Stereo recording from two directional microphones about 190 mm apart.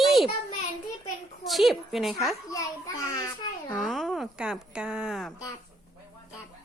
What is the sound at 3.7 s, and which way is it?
Speech, 5° left (ahead or behind).